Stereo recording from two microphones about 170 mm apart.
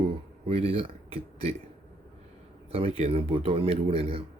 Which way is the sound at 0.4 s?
35° right (ahead or behind).